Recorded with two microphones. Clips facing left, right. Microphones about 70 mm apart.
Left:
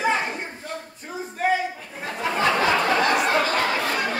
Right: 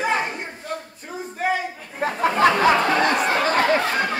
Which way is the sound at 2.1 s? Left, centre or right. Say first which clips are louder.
Right 5 dB; right.